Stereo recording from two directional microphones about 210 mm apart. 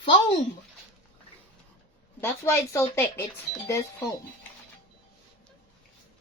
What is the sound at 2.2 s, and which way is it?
Speech, 15° left (ahead or behind).